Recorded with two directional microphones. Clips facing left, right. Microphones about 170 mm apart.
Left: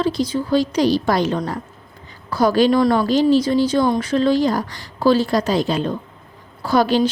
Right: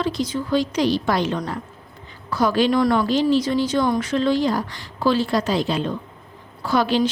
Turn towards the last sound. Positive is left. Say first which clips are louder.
# left 3 dB
turn(degrees=40)  # may be behind; listen again after turning